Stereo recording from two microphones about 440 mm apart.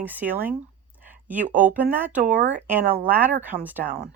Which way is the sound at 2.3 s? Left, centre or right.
Centre.